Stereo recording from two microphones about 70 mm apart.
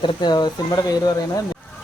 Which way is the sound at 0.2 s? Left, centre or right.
Left.